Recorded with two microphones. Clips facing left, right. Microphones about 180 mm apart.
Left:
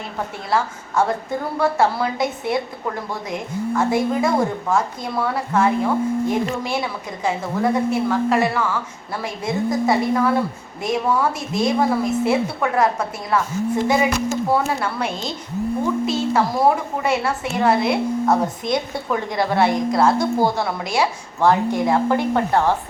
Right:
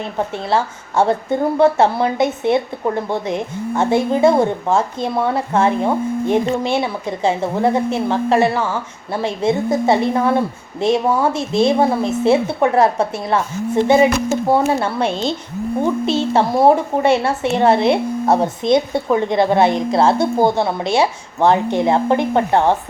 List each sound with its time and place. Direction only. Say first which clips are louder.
0.5 s a woman's voice: right 2 dB; 30° right (ahead or behind)
3.8 s a woman's voice: right 5 dB; 25° right (ahead or behind)